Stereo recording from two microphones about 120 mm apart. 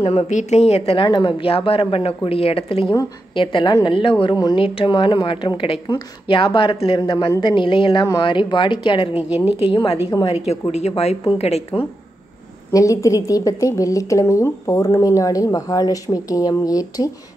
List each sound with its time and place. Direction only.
0.0 s speech: 55° left (ahead or behind)
2.9 s speech: 40° left (ahead or behind)
4.4 s speech: 35° left (ahead or behind)
4.6 s speech: 50° left (ahead or behind)
4.9 s speech: 40° left (ahead or behind)
9.1 s a woman's voice: 15° right (ahead or behind)
10.7 s speech: 60° left (ahead or behind)
12.7 s a woman's voice: 25° left (ahead or behind)